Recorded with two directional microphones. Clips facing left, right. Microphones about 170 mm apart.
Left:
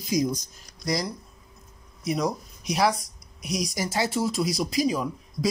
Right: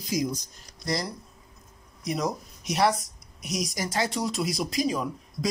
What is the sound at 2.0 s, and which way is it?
Speech, centre (ahead or behind).